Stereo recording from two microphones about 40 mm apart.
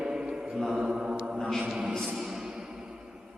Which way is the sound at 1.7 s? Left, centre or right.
Centre.